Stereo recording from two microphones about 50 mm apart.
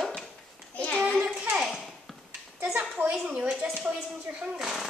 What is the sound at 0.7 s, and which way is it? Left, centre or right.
Child singing, left.